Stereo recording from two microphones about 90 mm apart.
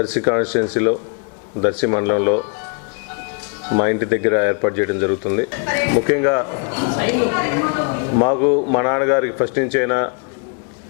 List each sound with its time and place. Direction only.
0.0 s speech: 20° left (ahead or behind)
3.7 s speech: 20° left (ahead or behind)